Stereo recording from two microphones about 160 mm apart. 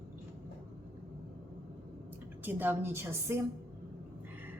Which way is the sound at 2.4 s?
10° right (ahead or behind).